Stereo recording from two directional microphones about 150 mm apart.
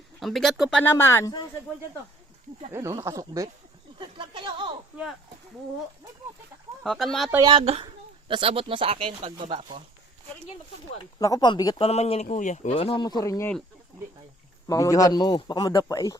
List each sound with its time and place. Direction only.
0.2 s speech: centre (ahead or behind)
0.8 s speech: 15° left (ahead or behind)
2.7 s speech: 20° right (ahead or behind)
3.9 s a sound: 35° right (ahead or behind)
6.8 s speech: centre (ahead or behind)
7.6 s speech: 45° right (ahead or behind)
7.9 s speech: 35° right (ahead or behind)
11.2 s a man's voice: 25° left (ahead or behind)
11.9 s speech: 45° left (ahead or behind)
12.7 s a man's voice: 35° left (ahead or behind)
14.7 s a man's voice: 20° left (ahead or behind)